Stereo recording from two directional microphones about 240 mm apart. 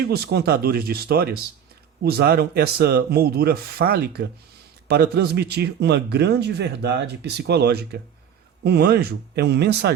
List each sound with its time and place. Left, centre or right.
0.0 s a man's voice: right